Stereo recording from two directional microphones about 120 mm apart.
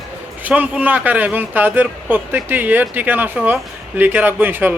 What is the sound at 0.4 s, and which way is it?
A woman's voice, 15° right (ahead or behind).